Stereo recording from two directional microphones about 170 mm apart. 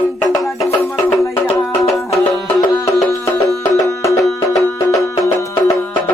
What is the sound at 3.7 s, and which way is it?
Music, 20° left (ahead or behind).